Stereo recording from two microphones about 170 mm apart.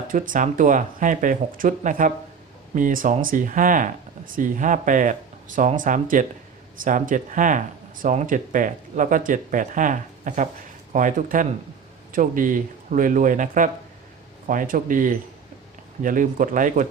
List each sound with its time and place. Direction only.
0.1 s speech: 50° right (ahead or behind)